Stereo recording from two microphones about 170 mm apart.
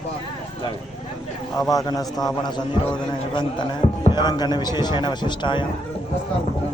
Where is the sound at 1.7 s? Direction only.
20° left (ahead or behind).